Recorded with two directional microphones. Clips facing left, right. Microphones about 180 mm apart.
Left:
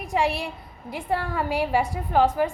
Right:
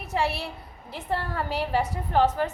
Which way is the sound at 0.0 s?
15° left (ahead or behind).